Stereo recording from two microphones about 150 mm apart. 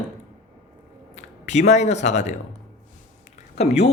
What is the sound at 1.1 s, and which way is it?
Speech, 50° left (ahead or behind).